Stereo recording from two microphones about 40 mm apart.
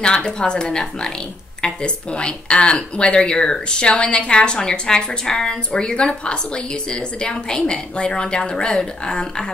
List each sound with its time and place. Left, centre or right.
0.0 s speech: left